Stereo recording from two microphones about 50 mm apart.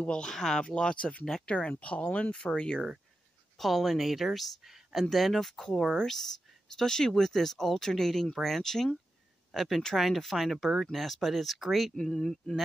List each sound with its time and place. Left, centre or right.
0.0 s speech: centre
2.3 s speech: centre
3.5 s speech: centre
11.9 s speech: centre